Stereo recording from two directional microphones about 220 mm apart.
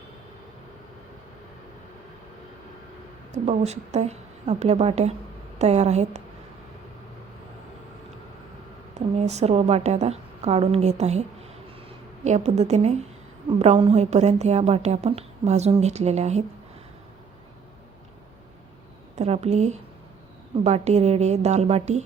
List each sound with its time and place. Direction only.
3.3 s a woman's voice: 30° right (ahead or behind)
9.0 s a woman's voice: 30° right (ahead or behind)
19.1 s a woman's voice: 30° right (ahead or behind)